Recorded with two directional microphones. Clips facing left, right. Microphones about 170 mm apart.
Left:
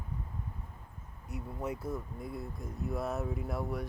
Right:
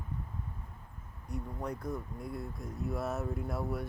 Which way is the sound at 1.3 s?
5° left (ahead or behind).